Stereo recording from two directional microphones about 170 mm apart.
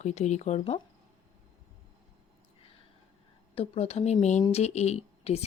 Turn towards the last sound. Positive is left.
turn(degrees=40)  # may be behind; listen again after turning